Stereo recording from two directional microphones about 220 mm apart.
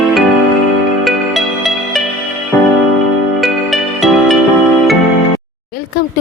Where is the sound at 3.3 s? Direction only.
Centre (ahead or behind).